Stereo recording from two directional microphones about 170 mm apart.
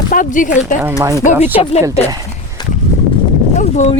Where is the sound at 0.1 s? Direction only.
50° left (ahead or behind).